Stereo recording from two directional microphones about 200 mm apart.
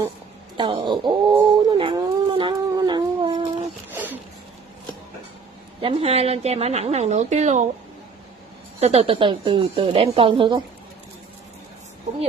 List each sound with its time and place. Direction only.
0.6 s dog: 25° right (ahead or behind)
3.9 s a sound: 10° right (ahead or behind)
5.8 s a woman's voice: 25° right (ahead or behind)
8.7 s speech: 30° right (ahead or behind)